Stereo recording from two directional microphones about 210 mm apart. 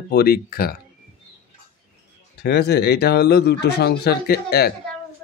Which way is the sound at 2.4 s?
50° left (ahead or behind).